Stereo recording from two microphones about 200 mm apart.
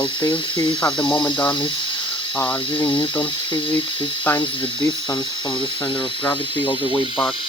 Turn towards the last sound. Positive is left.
turn(degrees=25)  # may be behind; listen again after turning